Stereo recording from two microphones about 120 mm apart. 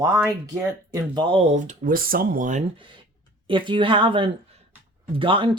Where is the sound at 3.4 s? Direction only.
45° right (ahead or behind).